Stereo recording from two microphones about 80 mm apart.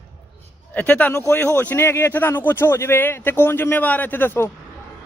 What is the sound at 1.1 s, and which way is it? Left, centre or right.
Speech, left.